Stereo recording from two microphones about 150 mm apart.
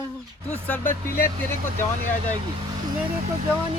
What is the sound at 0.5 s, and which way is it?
Speech, 10° left (ahead or behind).